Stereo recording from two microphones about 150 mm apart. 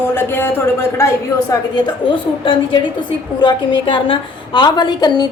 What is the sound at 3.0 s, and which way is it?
A woman's voice, 30° left (ahead or behind).